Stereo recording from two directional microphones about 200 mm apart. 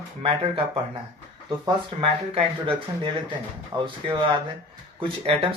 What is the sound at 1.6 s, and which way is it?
Speech, 25° right (ahead or behind).